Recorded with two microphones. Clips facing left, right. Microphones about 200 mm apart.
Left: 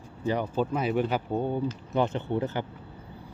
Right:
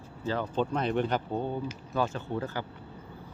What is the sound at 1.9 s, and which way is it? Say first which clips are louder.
Speech: left 3 dB; 20° left (ahead or behind).